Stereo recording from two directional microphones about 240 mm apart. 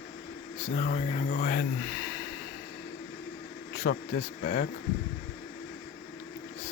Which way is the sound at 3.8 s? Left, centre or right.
Left.